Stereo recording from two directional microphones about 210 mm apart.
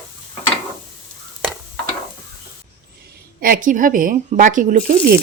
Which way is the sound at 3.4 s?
40° right (ahead or behind).